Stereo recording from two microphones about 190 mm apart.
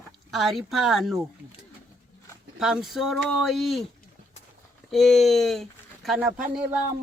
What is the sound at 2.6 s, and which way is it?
Speech, centre (ahead or behind).